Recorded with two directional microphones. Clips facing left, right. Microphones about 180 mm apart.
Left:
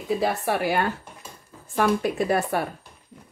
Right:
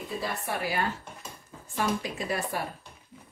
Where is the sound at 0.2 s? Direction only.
85° left; by 2.6 s 55° left (ahead or behind).